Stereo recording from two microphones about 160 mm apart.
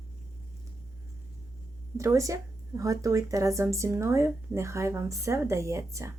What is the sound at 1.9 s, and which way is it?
A woman's voice, 20° right (ahead or behind).